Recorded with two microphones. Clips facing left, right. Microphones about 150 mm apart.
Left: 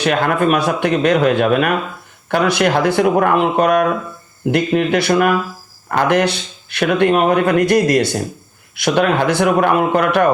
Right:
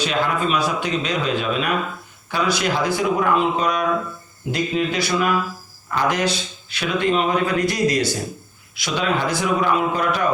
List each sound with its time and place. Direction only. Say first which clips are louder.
0.0 s speech: left 6 dB; 55° left (ahead or behind)